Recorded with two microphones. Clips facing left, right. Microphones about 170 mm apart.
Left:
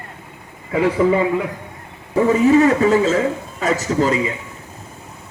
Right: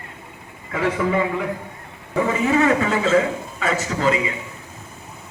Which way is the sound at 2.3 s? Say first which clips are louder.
Left 6 dB; 40° left (ahead or behind).